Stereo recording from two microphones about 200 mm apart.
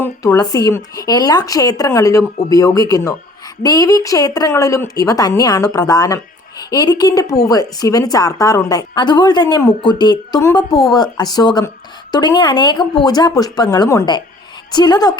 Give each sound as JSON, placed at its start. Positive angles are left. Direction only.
{"t": 0.0, "sound": "a woman's voice", "side_deg": 15}